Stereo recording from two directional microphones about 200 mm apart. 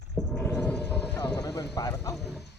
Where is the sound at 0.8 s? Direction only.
55° left (ahead or behind).